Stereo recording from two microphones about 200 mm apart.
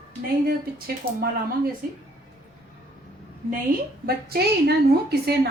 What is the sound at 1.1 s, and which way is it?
Speech, 45° right (ahead or behind).